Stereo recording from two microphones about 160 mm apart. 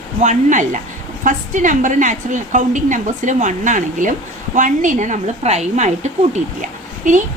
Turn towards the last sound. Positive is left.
turn(degrees=-50)  # may be behind; listen again after turning